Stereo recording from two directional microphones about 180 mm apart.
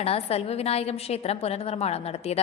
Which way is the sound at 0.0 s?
35° left (ahead or behind).